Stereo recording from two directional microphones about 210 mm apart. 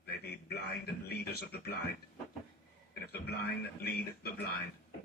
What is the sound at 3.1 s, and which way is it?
A man's voice, 50° left (ahead or behind).